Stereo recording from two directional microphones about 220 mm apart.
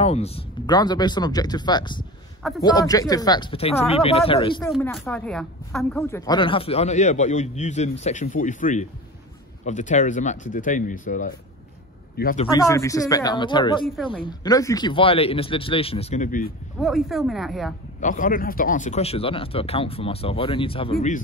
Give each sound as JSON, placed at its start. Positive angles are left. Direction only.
{"t": 0.0, "sound": "speech", "side_deg": 30}
{"t": 4.6, "sound": "speech", "side_deg": 0}
{"t": 12.4, "sound": "speech", "side_deg": 20}
{"t": 16.8, "sound": "speech", "side_deg": 0}
{"t": 18.0, "sound": "speech", "side_deg": 35}